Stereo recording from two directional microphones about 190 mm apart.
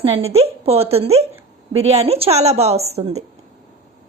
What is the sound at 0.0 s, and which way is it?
A woman's voice, 30° right (ahead or behind).